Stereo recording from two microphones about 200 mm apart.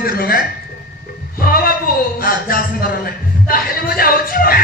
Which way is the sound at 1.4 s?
45° left (ahead or behind).